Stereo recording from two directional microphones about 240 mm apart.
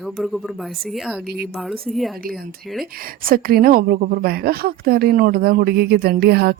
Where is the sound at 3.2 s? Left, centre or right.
Right.